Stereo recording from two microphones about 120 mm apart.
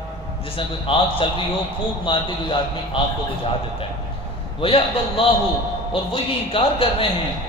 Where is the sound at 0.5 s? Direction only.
50° left (ahead or behind).